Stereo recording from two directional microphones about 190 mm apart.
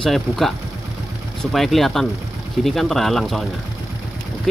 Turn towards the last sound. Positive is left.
turn(degrees=0)  # may be behind; listen again after turning